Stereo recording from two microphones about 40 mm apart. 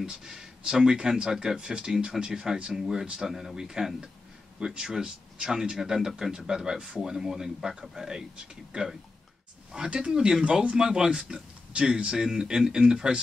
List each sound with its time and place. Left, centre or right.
0.0 s speech: centre
9.7 s a man's voice: centre
10.8 s speech: centre
12.3 s speech: centre